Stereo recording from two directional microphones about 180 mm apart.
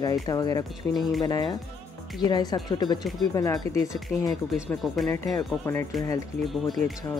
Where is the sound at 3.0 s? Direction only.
Centre (ahead or behind).